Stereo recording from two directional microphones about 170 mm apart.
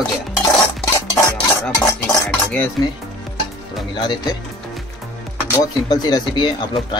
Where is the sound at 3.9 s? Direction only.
25° left (ahead or behind).